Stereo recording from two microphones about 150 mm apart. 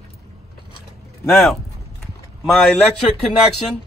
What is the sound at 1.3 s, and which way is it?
Speech, 5° left (ahead or behind).